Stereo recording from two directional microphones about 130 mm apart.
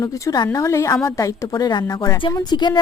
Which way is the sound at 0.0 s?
30° left (ahead or behind).